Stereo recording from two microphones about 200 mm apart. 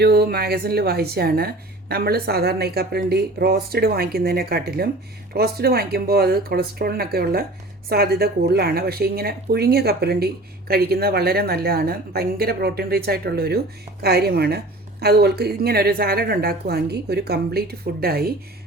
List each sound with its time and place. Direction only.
0.0 s a woman's voice: 55° right (ahead or behind)